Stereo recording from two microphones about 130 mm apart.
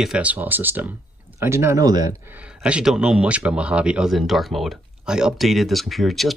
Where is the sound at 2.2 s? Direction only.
10° right (ahead or behind).